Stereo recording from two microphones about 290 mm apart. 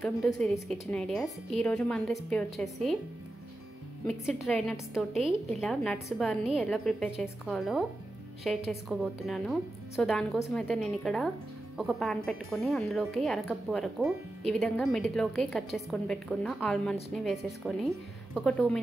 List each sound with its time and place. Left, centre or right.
0.0 s speech: centre
4.1 s speech: centre